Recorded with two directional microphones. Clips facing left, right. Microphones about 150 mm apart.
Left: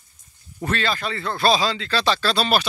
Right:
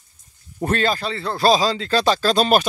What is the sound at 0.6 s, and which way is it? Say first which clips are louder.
Speech: right 4 dB; 45° right (ahead or behind).